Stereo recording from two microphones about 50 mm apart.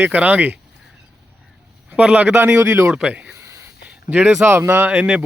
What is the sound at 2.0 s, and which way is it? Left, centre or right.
Speech, right.